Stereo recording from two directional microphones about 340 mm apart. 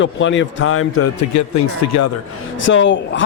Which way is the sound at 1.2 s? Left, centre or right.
Left.